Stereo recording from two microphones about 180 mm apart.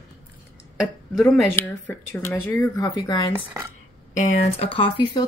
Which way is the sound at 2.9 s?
20° left (ahead or behind).